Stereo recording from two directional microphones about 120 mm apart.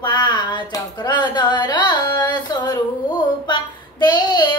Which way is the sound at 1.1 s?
40° left (ahead or behind).